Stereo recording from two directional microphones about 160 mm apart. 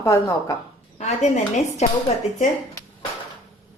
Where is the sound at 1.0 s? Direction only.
45° left (ahead or behind).